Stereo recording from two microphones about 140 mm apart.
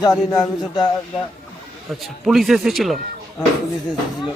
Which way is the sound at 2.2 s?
Centre (ahead or behind).